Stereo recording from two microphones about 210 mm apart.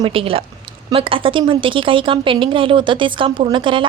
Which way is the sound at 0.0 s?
25° right (ahead or behind).